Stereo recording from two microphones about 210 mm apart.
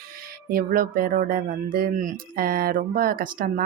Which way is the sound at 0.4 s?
45° right (ahead or behind).